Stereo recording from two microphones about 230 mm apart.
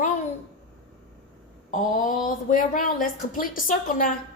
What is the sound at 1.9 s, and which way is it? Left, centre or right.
A woman's voice, left.